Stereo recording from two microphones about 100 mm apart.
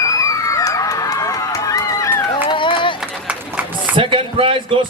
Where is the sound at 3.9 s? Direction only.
60° right (ahead or behind).